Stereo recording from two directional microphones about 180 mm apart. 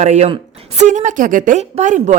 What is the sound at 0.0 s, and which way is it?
Speech, 40° right (ahead or behind).